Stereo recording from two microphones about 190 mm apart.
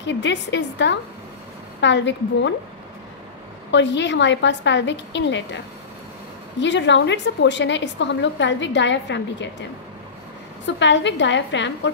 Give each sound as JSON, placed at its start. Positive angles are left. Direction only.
{"t": 0.0, "sound": "a woman's voice", "side_deg": 70}
{"t": 3.7, "sound": "a woman's voice", "side_deg": 70}
{"t": 6.6, "sound": "a woman's voice", "side_deg": 70}
{"t": 10.8, "sound": "a woman's voice", "side_deg": 70}